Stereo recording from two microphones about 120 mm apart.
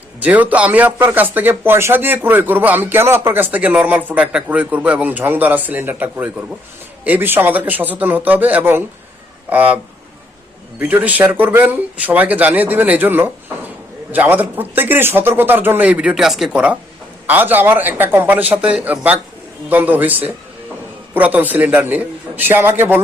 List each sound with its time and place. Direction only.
0.2 s speech: 10° right (ahead or behind)